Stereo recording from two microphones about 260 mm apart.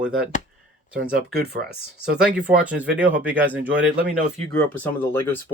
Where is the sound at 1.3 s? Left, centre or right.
Right.